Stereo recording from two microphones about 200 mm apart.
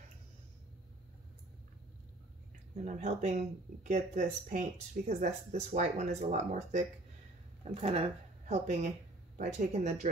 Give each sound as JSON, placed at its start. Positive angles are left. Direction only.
{"t": 2.8, "sound": "speech", "side_deg": -40}